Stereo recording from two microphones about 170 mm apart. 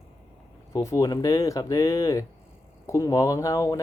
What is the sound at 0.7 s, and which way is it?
Speech, 15° left (ahead or behind).